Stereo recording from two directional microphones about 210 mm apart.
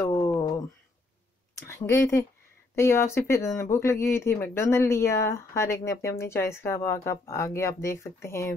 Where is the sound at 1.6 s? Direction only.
10° left (ahead or behind).